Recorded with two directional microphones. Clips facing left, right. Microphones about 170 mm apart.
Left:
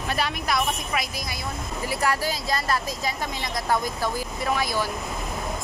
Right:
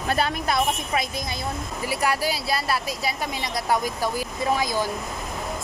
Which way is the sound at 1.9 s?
15° right (ahead or behind).